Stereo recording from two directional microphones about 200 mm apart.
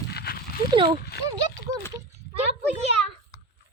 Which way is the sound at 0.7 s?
25° right (ahead or behind).